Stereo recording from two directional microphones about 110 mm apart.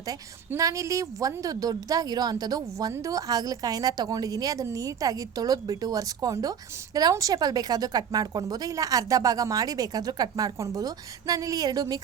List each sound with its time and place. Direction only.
0.1 s a woman's voice: 30° right (ahead or behind)